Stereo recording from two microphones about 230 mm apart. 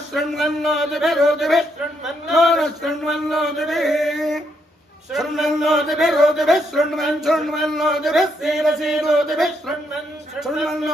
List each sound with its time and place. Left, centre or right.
0.1 s a man's voice: centre